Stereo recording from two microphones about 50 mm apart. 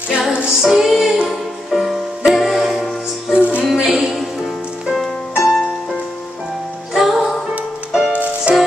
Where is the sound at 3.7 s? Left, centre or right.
Centre.